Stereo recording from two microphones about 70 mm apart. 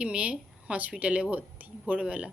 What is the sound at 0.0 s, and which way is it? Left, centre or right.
A woman's voice, centre.